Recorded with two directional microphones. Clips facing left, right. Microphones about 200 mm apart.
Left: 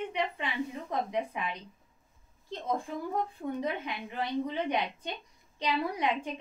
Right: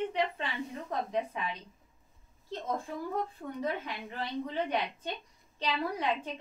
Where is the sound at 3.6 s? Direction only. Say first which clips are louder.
Left 1 dB; 15° left (ahead or behind).